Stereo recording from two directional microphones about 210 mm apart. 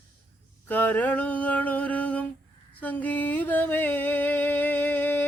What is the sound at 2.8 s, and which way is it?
Music, 10° left (ahead or behind).